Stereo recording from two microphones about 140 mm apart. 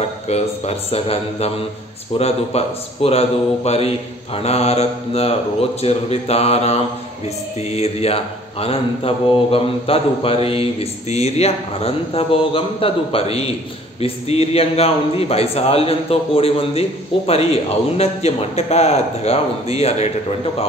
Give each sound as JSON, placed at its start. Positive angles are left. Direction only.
{"t": 0.0, "sound": "mantra", "side_deg": 50}